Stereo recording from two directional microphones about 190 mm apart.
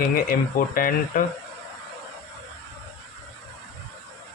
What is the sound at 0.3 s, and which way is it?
Speech, 50° left (ahead or behind).